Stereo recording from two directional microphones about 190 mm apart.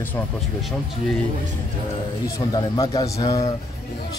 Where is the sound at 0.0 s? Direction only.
5° left (ahead or behind).